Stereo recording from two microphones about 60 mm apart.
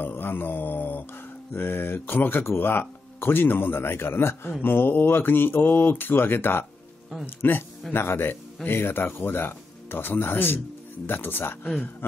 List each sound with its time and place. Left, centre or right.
0.0 s mantra: left
1.5 s speech: left